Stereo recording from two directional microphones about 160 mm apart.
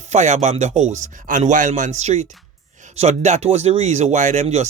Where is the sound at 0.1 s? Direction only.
45° right (ahead or behind).